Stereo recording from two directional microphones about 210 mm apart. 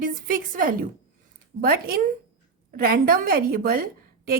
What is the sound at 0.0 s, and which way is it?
A woman's voice, 40° right (ahead or behind).